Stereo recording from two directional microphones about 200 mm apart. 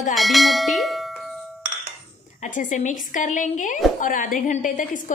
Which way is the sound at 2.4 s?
40° left (ahead or behind).